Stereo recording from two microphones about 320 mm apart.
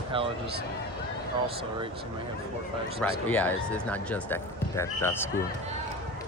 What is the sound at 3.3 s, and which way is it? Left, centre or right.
Speech, centre.